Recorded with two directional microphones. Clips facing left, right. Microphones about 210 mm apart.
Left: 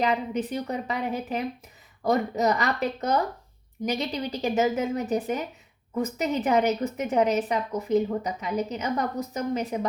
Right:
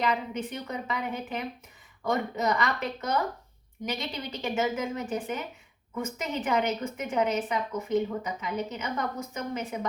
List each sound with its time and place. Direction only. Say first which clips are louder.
0.0 s a woman's voice: left 4 dB; 35° left (ahead or behind)